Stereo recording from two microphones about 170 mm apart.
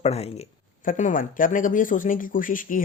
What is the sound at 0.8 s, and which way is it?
Speech, 50° left (ahead or behind).